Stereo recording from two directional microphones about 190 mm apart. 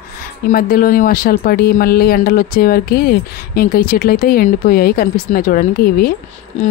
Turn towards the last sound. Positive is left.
turn(degrees=50)  # may be behind; listen again after turning